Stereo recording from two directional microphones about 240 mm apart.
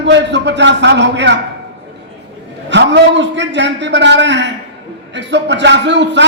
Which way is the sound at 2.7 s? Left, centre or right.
Right.